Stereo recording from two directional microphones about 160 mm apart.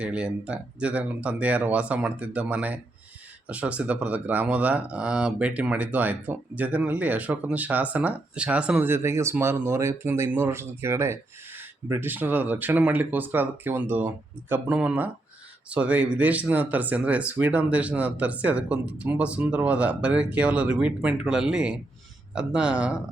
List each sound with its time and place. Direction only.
0.0 s speech: 5° right (ahead or behind)